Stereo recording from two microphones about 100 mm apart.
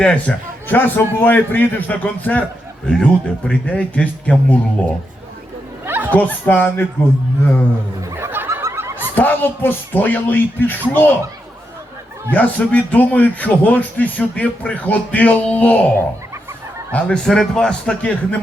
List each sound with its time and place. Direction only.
0.0 s a man's voice: 10° left (ahead or behind)
5.8 s chatter: 20° right (ahead or behind)
6.1 s a man's voice: 15° left (ahead or behind)
8.1 s snicker: 20° right (ahead or behind)
9.1 s a man's voice: 20° left (ahead or behind)
12.3 s a man's voice: 15° left (ahead or behind)